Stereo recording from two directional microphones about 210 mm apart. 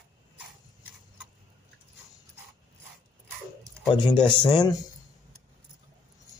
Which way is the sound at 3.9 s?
25° left (ahead or behind).